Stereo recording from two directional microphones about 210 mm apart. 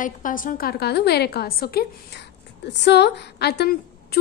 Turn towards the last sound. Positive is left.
turn(degrees=50)  # may be behind; listen again after turning